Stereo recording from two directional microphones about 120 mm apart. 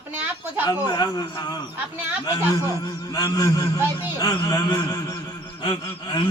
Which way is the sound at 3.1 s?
30° left (ahead or behind).